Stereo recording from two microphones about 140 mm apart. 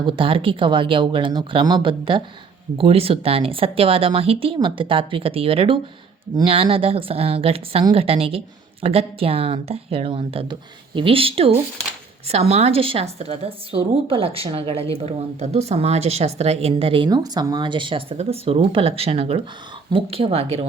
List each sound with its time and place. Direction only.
0.0 s a woman's voice: 35° right (ahead or behind)